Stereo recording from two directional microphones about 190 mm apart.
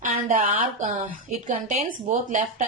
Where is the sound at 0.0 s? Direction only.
45° right (ahead or behind).